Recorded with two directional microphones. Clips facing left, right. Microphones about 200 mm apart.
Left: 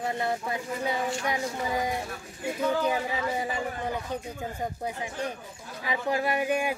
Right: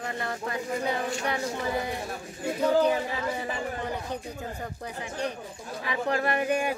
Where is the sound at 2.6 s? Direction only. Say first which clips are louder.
Right 4 dB; 35° right (ahead or behind).